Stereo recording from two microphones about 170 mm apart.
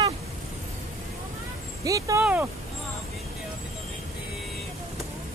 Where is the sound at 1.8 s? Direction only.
20° right (ahead or behind).